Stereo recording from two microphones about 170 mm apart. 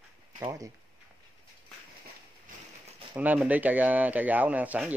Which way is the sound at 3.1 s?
10° right (ahead or behind).